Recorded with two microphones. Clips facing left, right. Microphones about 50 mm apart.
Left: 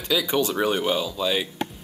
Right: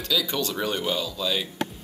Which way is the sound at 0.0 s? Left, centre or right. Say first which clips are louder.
Left 3 dB; centre.